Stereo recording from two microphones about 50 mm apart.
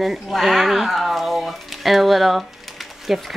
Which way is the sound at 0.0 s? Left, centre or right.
Centre.